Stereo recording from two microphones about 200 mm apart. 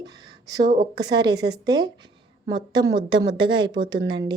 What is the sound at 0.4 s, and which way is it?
A woman's voice, 20° right (ahead or behind).